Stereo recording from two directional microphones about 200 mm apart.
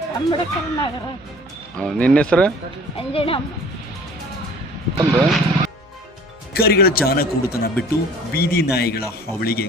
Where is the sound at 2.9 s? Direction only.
30° left (ahead or behind).